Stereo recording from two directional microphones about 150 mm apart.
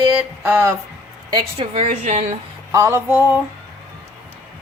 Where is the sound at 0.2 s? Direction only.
15° right (ahead or behind).